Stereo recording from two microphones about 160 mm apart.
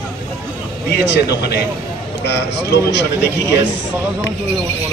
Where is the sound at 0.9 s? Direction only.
90° left.